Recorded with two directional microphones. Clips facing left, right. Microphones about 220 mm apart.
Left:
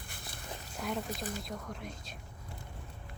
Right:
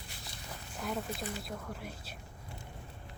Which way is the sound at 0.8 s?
Centre (ahead or behind).